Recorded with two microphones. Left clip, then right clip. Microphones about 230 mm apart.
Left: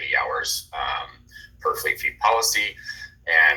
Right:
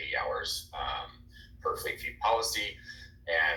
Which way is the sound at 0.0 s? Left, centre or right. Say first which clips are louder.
Left 9 dB; left.